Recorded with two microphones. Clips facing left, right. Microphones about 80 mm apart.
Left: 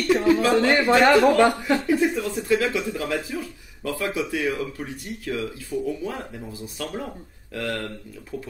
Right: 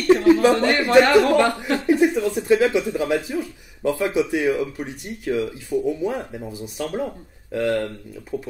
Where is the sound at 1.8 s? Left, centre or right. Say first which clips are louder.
Right 4 dB; right.